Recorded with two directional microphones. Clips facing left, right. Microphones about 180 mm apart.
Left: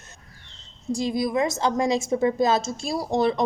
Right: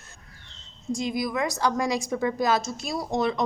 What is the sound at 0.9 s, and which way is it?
A woman's voice, 30° left (ahead or behind).